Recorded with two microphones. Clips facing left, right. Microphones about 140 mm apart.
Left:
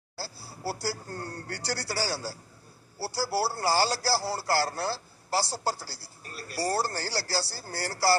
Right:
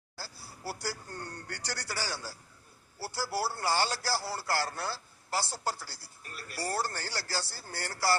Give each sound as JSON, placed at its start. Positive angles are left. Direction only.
{"t": 0.2, "sound": "a man's voice", "side_deg": 35}